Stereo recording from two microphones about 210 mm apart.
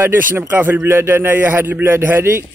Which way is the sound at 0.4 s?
10° right (ahead or behind).